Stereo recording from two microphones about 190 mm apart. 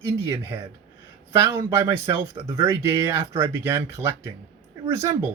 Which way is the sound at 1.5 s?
15° right (ahead or behind).